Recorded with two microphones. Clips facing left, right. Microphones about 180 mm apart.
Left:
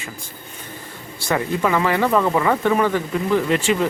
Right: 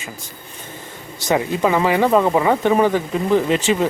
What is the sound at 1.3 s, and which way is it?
Speech, 20° right (ahead or behind).